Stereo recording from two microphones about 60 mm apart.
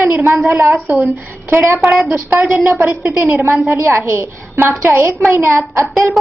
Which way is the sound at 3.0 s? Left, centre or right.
Right.